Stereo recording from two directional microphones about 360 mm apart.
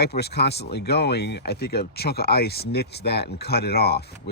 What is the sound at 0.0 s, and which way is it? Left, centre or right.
Speech, left.